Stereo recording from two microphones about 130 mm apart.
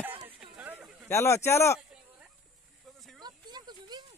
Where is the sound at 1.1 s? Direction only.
20° left (ahead or behind).